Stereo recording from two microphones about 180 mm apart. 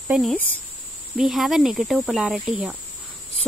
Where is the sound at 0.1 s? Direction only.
Centre (ahead or behind).